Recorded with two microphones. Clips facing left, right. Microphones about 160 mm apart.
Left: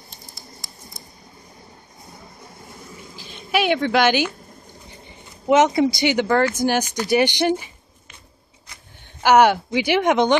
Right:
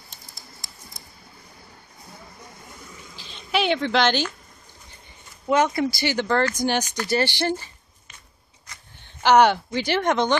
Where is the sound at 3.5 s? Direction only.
10° left (ahead or behind).